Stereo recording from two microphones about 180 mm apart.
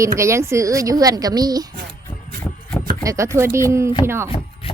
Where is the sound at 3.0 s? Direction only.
15° right (ahead or behind).